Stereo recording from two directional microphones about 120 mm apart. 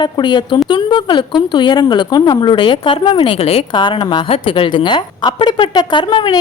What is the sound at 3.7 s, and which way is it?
A woman's voice, 40° left (ahead or behind).